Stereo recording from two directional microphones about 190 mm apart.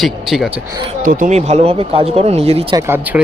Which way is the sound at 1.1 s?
45° right (ahead or behind).